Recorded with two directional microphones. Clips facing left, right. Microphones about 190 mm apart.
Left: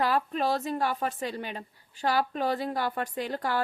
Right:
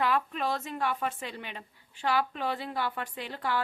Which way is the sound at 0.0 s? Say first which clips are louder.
Left 2 dB; 35° left (ahead or behind).